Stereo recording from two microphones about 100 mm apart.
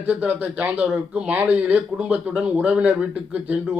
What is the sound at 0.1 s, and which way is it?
Speech, 15° right (ahead or behind).